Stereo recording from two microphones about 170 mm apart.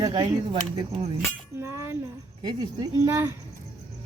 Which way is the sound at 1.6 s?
15° right (ahead or behind).